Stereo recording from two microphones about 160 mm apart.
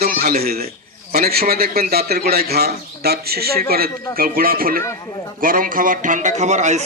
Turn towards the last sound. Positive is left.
turn(degrees=-45)  # may be behind; listen again after turning